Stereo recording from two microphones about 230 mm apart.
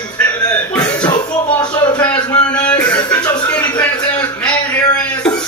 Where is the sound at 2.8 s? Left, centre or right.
Centre.